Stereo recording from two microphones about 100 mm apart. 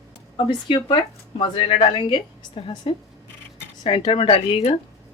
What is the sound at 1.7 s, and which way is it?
A woman's voice, 65° left (ahead or behind).